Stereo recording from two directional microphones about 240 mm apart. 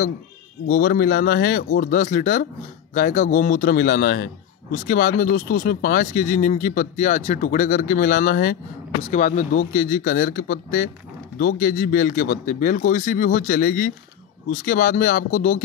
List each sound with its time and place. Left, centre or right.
0.7 s a man's voice: left